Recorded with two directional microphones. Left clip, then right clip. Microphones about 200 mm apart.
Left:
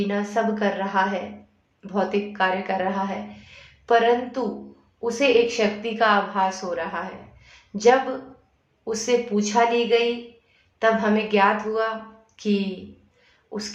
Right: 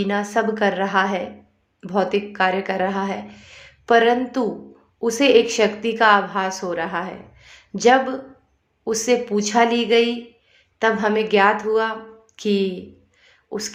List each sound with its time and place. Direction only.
0.1 s speech: 40° right (ahead or behind)
7.4 s a sound: 40° right (ahead or behind)
8.8 s speech: 35° right (ahead or behind)